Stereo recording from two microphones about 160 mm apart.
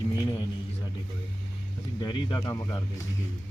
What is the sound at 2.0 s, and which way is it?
Speech, 30° left (ahead or behind).